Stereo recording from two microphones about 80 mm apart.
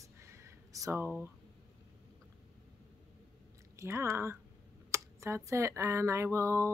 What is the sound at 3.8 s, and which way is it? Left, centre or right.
A woman's voice, right.